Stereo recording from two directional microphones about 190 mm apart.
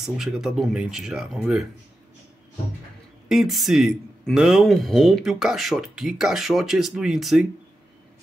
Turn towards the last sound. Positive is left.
turn(degrees=0)  # may be behind; listen again after turning